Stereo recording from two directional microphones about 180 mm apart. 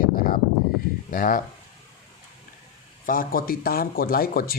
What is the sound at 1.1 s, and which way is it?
Speech, 50° left (ahead or behind).